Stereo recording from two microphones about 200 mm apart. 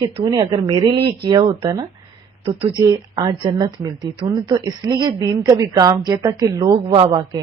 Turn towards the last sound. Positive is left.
turn(degrees=-25)  # may be behind; listen again after turning